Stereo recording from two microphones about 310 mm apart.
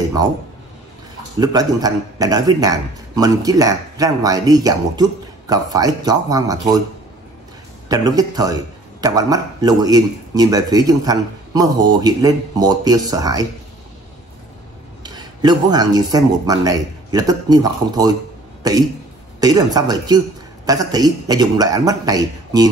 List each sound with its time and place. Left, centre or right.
1.4 s speech: centre
7.9 s speech: centre
15.0 s speech: centre